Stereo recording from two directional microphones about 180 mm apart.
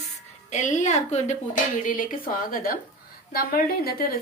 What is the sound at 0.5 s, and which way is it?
A woman's voice, 40° left (ahead or behind).